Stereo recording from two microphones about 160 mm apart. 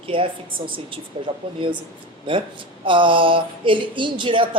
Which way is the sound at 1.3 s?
35° right (ahead or behind).